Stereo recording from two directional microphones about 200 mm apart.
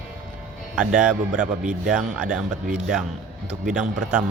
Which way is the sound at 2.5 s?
40° right (ahead or behind).